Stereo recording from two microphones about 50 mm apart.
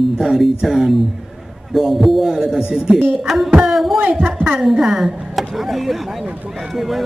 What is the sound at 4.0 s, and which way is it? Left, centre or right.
Speech, right.